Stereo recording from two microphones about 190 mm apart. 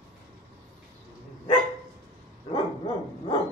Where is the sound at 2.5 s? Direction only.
25° left (ahead or behind).